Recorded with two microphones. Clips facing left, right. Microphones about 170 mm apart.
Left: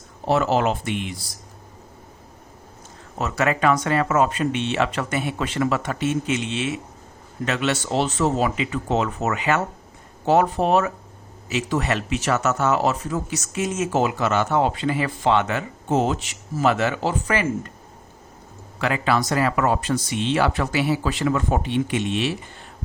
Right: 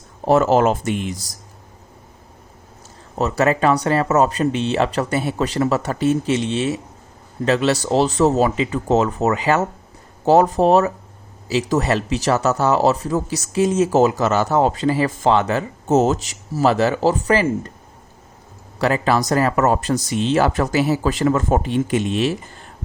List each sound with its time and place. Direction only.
0.3 s speech: 45° right (ahead or behind)
3.2 s speech: 35° right (ahead or behind)
18.8 s speech: 40° right (ahead or behind)